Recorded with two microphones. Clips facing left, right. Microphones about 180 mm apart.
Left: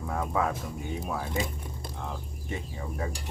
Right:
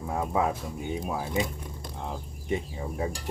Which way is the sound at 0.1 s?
20° right (ahead or behind).